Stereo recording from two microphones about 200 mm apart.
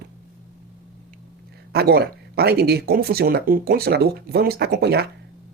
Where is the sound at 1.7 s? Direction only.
50° right (ahead or behind).